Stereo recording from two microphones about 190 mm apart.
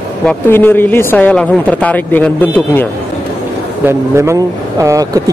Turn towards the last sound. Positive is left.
turn(degrees=-20)  # may be behind; listen again after turning